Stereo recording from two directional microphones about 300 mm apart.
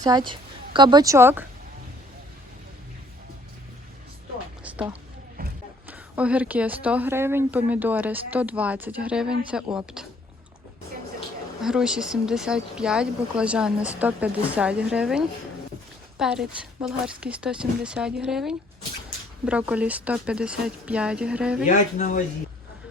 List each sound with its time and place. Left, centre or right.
0.0 s speech: centre
4.6 s music: centre
5.4 s mechanisms: right
5.9 s speech: centre
11.6 s speech: centre
21.7 s speech: left